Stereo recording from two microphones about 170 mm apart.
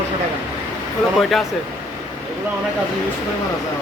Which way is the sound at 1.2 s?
Centre (ahead or behind).